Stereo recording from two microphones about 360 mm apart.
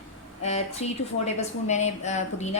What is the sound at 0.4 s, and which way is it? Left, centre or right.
A woman's voice, centre.